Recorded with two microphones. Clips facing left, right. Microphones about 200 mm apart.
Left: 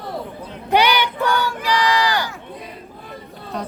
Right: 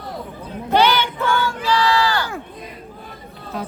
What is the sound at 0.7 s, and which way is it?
Child singing, 15° left (ahead or behind).